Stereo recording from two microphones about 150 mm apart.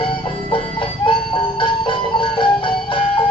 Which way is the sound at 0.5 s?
35° left (ahead or behind).